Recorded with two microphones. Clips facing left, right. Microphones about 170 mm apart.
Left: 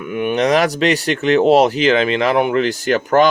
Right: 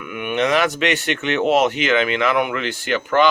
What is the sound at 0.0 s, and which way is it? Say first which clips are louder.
Speech: left 4 dB; 35° left (ahead or behind).